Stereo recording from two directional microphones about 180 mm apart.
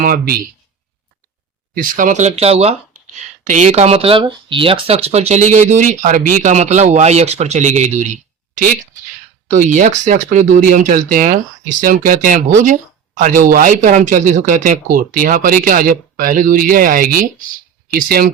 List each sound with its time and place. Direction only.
0.0 s speech: 55° right (ahead or behind)
1.7 s speech: 50° right (ahead or behind)